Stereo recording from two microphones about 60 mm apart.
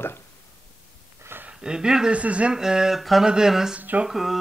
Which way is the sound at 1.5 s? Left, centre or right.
Centre.